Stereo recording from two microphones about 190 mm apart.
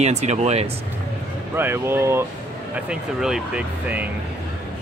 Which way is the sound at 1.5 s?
10° right (ahead or behind).